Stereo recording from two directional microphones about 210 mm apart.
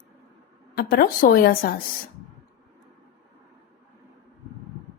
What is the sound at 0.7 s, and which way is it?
A woman's voice, 45° left (ahead or behind).